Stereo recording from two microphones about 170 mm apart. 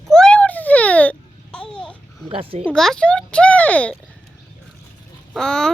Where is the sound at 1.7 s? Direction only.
5° left (ahead or behind).